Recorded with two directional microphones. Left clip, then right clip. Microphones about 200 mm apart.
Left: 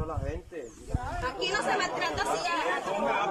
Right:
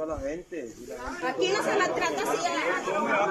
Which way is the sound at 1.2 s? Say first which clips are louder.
Right 4 dB; 10° right (ahead or behind).